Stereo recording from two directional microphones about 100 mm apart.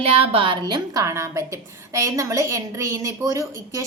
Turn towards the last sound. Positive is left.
turn(degrees=-35)  # may be behind; listen again after turning